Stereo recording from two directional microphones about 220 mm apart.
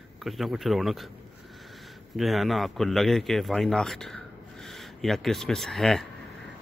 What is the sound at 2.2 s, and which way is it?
A man's voice, centre (ahead or behind).